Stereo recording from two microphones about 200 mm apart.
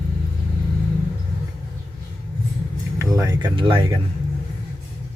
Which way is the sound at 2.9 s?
15° right (ahead or behind).